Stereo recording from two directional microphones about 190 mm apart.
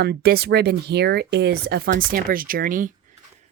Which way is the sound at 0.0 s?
55° right (ahead or behind).